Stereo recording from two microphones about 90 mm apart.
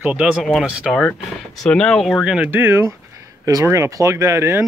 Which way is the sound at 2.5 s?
25° right (ahead or behind).